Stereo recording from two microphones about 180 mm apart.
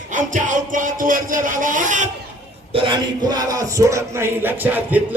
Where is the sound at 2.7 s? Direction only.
25° right (ahead or behind).